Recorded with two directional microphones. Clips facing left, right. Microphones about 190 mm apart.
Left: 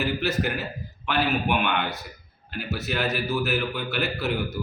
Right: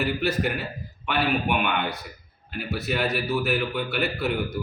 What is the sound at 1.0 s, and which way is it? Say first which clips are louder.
Speech: even; centre (ahead or behind).